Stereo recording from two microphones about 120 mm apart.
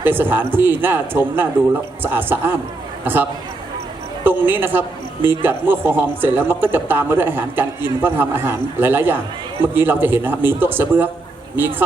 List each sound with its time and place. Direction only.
0.0 s a man's voice: 15° right (ahead or behind)